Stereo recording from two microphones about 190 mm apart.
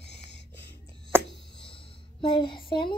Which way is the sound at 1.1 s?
10° right (ahead or behind).